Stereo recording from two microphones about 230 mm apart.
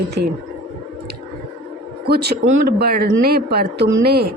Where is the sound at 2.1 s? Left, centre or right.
Right.